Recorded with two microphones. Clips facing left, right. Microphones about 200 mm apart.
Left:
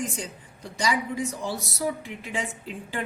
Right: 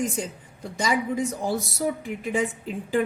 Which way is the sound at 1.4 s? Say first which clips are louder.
Right 4 dB; 50° right (ahead or behind).